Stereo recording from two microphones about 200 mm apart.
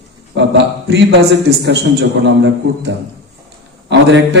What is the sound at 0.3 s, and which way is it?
A man's voice, 60° right (ahead or behind).